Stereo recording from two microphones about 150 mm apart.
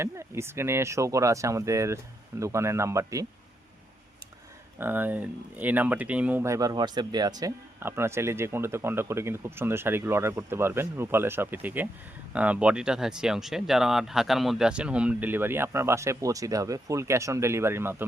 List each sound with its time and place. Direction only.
0.0 s speech: 15° right (ahead or behind)
4.8 s speech: 15° right (ahead or behind)
7.8 s speech: 15° right (ahead or behind)